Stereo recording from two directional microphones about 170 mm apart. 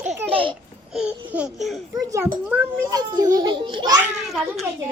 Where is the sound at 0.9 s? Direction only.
5° right (ahead or behind).